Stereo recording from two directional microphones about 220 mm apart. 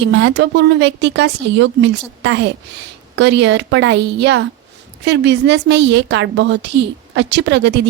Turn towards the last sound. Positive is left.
turn(degrees=-50)  # may be behind; listen again after turning